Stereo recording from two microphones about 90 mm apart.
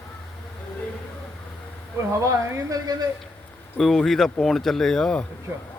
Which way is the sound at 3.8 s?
5° left (ahead or behind).